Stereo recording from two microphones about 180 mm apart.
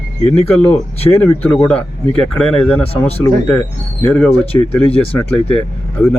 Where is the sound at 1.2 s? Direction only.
10° left (ahead or behind).